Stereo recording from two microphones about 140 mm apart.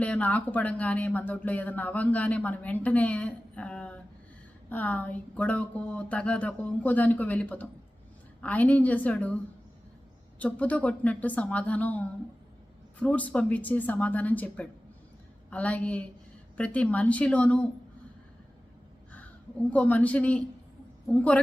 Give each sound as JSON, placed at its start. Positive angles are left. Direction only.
{"t": 0.0, "sound": "speech", "side_deg": 10}
{"t": 10.3, "sound": "speech", "side_deg": 10}
{"t": 19.1, "sound": "speech", "side_deg": 10}